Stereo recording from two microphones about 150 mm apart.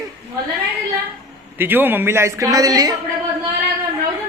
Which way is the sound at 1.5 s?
15° right (ahead or behind).